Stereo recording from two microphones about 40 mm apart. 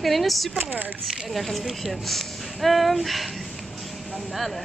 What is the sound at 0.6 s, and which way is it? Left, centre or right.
Speech, right.